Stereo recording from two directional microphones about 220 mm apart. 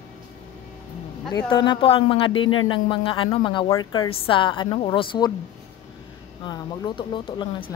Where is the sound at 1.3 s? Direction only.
20° left (ahead or behind).